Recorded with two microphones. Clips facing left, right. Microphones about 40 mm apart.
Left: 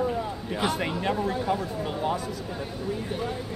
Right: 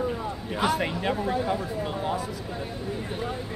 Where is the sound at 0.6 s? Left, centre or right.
Centre.